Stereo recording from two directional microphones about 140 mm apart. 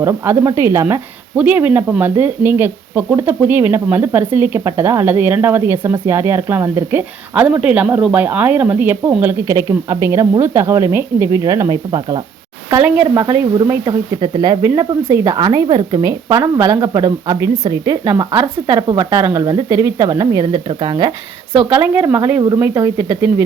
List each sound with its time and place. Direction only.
0.0 s a woman's voice: 20° right (ahead or behind)
12.8 s a woman's voice: 15° right (ahead or behind)
21.7 s a woman's voice: 15° right (ahead or behind)